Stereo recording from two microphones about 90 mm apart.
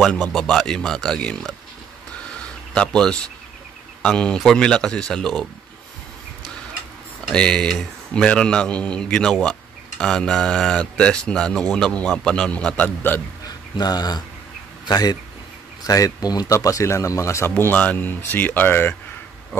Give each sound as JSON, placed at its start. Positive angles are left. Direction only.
{"t": 0.2, "sound": "speech", "side_deg": 5}
{"t": 2.3, "sound": "a sound", "side_deg": 10}
{"t": 4.0, "sound": "speech", "side_deg": 10}
{"t": 7.3, "sound": "speech", "side_deg": 10}
{"t": 13.7, "sound": "speech", "side_deg": 50}
{"t": 16.5, "sound": "speech", "side_deg": 35}